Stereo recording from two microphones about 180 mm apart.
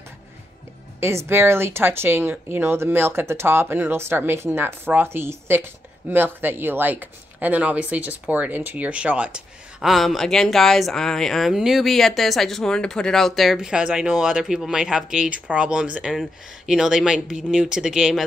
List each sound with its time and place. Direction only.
1.0 s speech: 15° right (ahead or behind)